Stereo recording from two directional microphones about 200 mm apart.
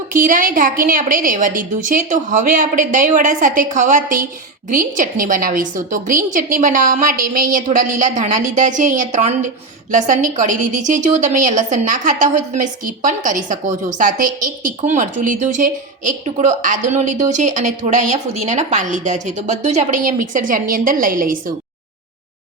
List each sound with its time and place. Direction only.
0.1 s a woman's voice: 40° right (ahead or behind)